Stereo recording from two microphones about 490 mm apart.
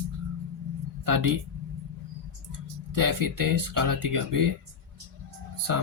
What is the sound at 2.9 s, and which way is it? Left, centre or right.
Speech, right.